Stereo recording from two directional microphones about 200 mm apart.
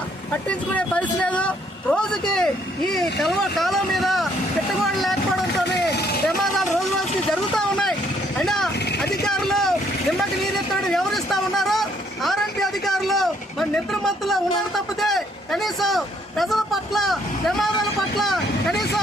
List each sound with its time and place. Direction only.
0.4 s speech: 5° left (ahead or behind)
5.6 s vehicle: 55° left (ahead or behind)
6.2 s a sound: centre (ahead or behind)
8.4 s vehicle: centre (ahead or behind)
15.0 s speech: centre (ahead or behind)